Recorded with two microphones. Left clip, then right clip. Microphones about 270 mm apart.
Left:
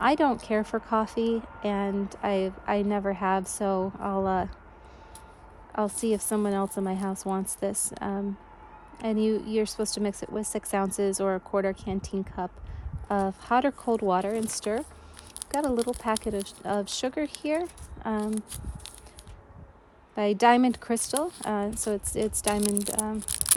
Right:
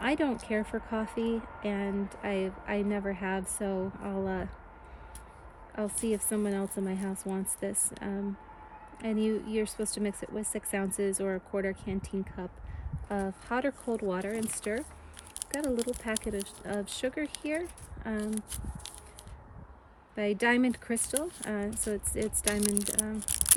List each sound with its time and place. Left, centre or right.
0.0 s speech: centre
5.7 s a woman's voice: left
15.7 s speech: centre
16.0 s speech: left
18.2 s speech: centre
20.1 s speech: left
21.1 s speech: centre
21.8 s a woman's voice: centre
22.6 s speech: centre